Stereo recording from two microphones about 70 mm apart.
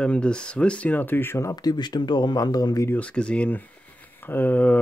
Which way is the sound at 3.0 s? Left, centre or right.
Centre.